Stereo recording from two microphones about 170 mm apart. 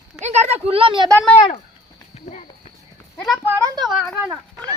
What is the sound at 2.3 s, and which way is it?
Speech, 40° left (ahead or behind).